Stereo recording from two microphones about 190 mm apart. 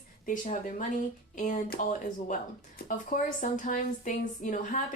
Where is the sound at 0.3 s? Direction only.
40° left (ahead or behind).